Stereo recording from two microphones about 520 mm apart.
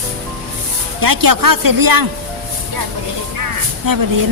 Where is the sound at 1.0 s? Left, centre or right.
Right.